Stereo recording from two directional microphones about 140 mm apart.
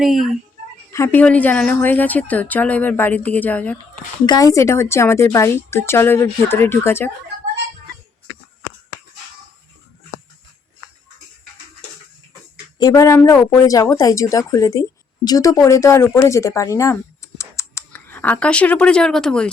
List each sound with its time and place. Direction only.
0.0 s speech: centre (ahead or behind)
0.9 s a woman's voice: 20° left (ahead or behind)
4.3 s a woman's voice: 25° left (ahead or behind)
12.8 s speech: 25° left (ahead or behind); by 19.5 s 5° left (ahead or behind)